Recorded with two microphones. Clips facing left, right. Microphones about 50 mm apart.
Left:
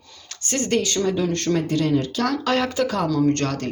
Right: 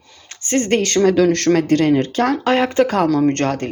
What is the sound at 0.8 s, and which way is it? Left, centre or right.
Speech, right.